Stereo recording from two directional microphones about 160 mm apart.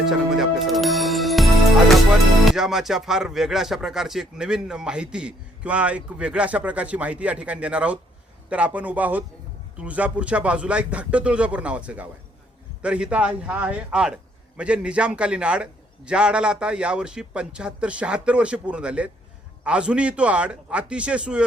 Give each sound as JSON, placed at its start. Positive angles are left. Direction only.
{"t": 0.0, "sound": "a man's voice", "side_deg": 0}